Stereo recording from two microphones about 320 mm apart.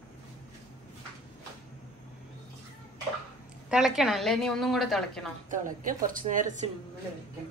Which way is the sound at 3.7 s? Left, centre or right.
Centre.